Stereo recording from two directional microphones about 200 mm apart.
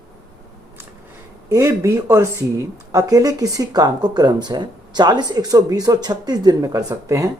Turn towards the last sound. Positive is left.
turn(degrees=-15)  # may be behind; listen again after turning